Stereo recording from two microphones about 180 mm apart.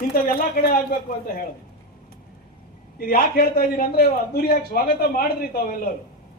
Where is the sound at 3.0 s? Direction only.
55° left (ahead or behind).